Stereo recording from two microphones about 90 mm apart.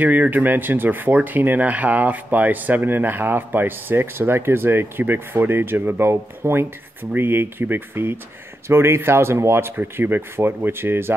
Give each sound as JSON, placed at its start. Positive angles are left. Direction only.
{"t": 0.0, "sound": "speech", "side_deg": -20}